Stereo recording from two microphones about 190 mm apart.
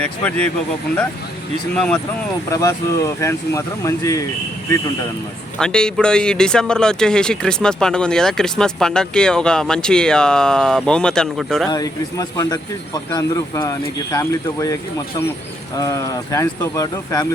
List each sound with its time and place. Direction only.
0.0 s speech: 5° left (ahead or behind)
2.5 s speech: 15° left (ahead or behind)
5.5 s speech: 5° left (ahead or behind)
11.7 s a man's voice: 20° left (ahead or behind)